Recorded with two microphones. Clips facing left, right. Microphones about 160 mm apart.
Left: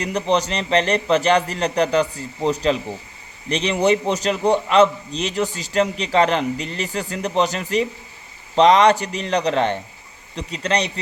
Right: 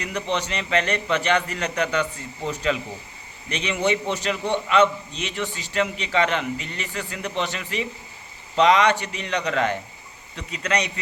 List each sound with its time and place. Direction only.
0.0 s a man's voice: 35° left (ahead or behind)